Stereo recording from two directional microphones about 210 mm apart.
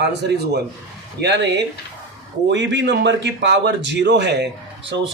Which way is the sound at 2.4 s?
55° right (ahead or behind).